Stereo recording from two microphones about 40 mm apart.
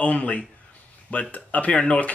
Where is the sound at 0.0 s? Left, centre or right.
Left.